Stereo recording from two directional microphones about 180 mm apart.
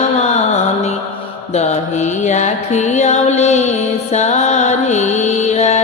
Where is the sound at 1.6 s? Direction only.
40° left (ahead or behind).